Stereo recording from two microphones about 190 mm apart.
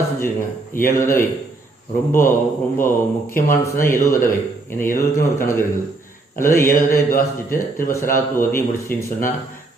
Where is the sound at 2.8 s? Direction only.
10° left (ahead or behind).